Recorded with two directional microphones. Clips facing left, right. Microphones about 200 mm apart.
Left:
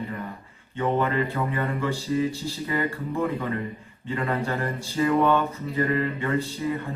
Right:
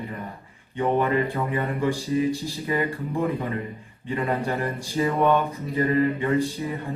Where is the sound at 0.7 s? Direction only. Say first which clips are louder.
Right 2 dB; 15° right (ahead or behind).